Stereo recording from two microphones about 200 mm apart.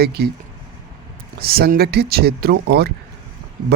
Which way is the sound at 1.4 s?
50° right (ahead or behind).